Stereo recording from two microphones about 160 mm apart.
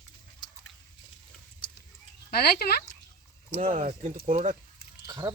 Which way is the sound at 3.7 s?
50° right (ahead or behind).